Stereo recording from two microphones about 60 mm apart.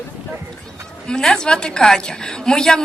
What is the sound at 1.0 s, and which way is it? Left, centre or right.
A woman's voice, centre.